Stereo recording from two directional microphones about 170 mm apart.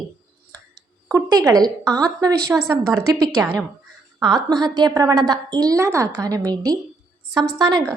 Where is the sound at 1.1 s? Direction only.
20° right (ahead or behind).